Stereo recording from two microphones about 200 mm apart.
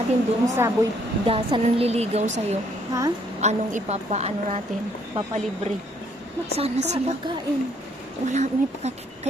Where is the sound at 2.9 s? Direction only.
20° right (ahead or behind).